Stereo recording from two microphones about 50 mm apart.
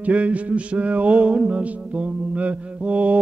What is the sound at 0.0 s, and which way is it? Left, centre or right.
Music, right.